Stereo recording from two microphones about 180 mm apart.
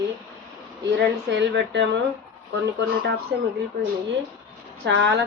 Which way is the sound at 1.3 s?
80° right.